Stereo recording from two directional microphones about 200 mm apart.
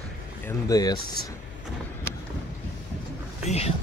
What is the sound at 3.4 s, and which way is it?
Speech, 30° left (ahead or behind).